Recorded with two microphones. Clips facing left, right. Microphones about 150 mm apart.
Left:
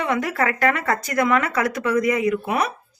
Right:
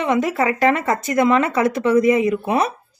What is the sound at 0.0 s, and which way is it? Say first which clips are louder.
A woman's voice: right 4 dB; 20° right (ahead or behind).